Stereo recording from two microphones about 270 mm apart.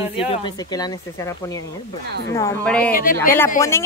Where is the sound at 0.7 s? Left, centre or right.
Centre.